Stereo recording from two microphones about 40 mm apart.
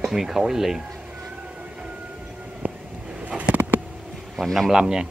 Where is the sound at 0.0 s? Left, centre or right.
Centre.